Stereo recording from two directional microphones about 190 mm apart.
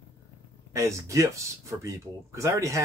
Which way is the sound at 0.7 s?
15° right (ahead or behind).